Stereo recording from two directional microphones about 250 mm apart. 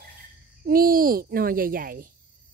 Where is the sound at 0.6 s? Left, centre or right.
Right.